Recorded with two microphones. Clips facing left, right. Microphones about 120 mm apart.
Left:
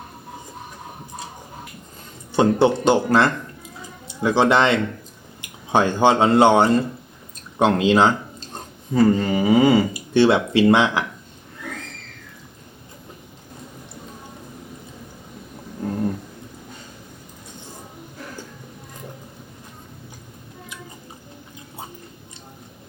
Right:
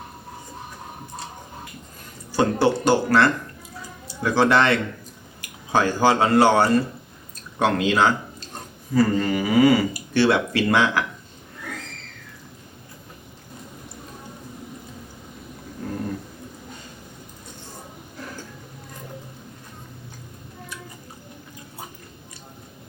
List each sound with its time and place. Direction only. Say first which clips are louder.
2.3 s speech: left 3 dB; 20° left (ahead or behind)